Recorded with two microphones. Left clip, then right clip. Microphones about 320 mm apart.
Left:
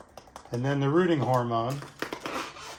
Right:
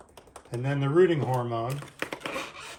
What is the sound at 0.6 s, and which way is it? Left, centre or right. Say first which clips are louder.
Speech: right 2 dB; centre.